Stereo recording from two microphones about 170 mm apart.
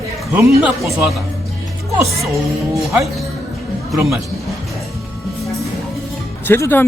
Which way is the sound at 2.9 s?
Centre (ahead or behind).